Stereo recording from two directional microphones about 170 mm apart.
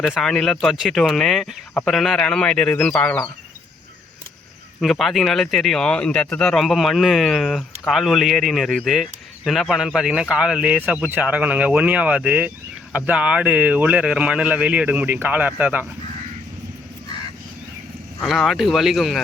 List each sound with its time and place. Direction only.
0.0 s speech: centre (ahead or behind)
4.8 s speech: centre (ahead or behind)
18.2 s speech: centre (ahead or behind)